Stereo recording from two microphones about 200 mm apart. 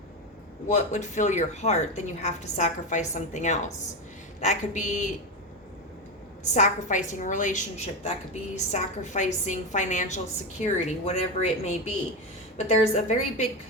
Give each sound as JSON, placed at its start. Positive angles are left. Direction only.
{"t": 0.7, "sound": "a woman's voice", "side_deg": 35}
{"t": 6.4, "sound": "a woman's voice", "side_deg": 35}